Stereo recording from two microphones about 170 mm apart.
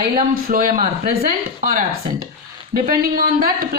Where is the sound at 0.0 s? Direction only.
55° right (ahead or behind).